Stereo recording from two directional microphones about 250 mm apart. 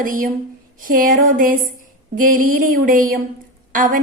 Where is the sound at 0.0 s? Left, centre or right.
Right.